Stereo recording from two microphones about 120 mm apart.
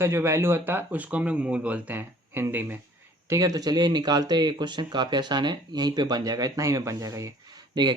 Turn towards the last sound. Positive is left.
turn(degrees=-25)  # may be behind; listen again after turning